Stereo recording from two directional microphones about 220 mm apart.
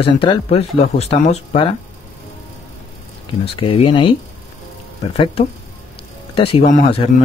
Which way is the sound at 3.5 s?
25° left (ahead or behind).